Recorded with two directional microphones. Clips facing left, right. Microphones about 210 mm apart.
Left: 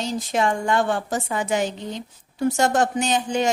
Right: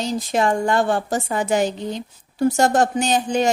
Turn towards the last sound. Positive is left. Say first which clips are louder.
# right 3 dB
turn(degrees=-35)  # may be behind; listen again after turning